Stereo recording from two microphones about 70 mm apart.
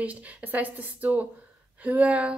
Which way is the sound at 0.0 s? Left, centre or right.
Right.